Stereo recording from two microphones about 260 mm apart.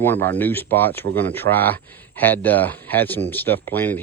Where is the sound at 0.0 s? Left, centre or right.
Centre.